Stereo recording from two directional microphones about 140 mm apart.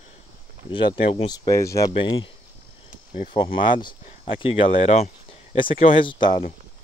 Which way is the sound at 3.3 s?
35° left (ahead or behind).